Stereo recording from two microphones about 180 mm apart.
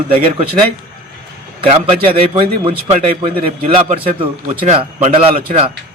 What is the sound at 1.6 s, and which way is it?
A man's voice, 30° right (ahead or behind).